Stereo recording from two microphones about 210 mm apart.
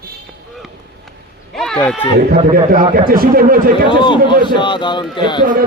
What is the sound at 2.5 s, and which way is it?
Speech, 40° right (ahead or behind).